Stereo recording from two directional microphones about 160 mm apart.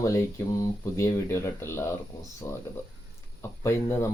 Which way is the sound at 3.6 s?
20° left (ahead or behind).